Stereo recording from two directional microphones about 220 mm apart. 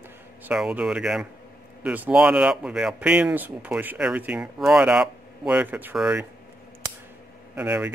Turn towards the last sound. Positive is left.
turn(degrees=-10)  # may be behind; listen again after turning